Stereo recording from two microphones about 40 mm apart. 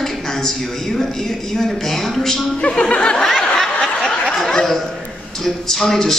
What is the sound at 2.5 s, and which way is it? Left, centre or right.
Speech, left.